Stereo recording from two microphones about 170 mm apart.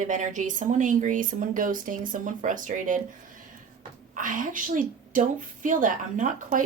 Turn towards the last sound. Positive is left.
turn(degrees=-50)  # may be behind; listen again after turning